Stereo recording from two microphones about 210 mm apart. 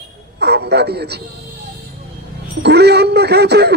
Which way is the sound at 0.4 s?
50° right (ahead or behind).